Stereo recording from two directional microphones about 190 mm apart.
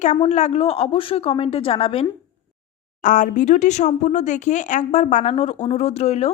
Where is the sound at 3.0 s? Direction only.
45° left (ahead or behind).